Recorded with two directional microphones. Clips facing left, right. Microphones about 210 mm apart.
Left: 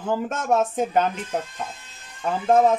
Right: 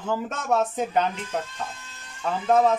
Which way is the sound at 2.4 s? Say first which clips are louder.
Left 2 dB; 45° left (ahead or behind).